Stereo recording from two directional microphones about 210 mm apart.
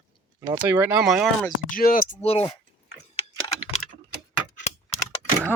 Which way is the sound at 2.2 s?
30° left (ahead or behind).